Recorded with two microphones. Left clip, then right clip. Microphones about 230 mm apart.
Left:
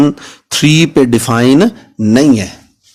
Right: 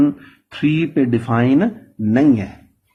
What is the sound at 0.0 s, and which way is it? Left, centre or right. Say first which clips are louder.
Speech: left 5 dB; left.